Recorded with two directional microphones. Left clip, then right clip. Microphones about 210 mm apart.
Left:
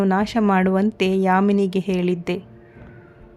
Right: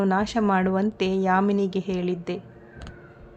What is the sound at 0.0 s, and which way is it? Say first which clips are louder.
A woman's voice: left 3 dB; 35° left (ahead or behind).